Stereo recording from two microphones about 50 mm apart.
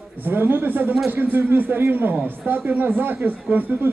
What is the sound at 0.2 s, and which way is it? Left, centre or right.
Speech, right.